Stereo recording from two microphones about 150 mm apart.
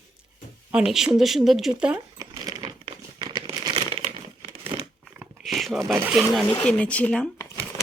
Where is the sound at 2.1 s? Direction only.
25° right (ahead or behind).